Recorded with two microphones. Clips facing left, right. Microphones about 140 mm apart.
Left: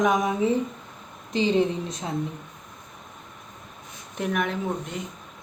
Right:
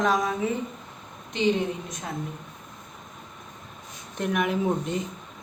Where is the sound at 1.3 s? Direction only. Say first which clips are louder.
Left 2 dB; 30° left (ahead or behind).